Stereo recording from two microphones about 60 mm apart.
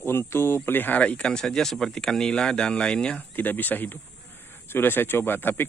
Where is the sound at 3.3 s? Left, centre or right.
Left.